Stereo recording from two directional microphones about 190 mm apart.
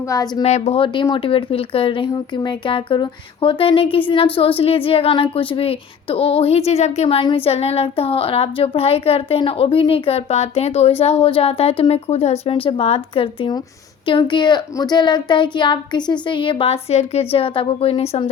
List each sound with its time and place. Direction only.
0.1 s a woman's voice: 20° left (ahead or behind)
0.4 s a woman's voice: 35° left (ahead or behind)